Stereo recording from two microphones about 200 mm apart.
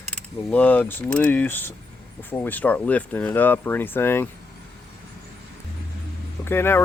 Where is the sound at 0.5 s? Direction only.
5° left (ahead or behind).